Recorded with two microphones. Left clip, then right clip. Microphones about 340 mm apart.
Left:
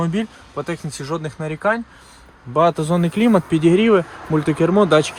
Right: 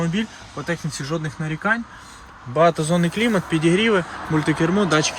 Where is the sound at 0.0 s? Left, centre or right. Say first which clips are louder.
Left 2 dB; centre.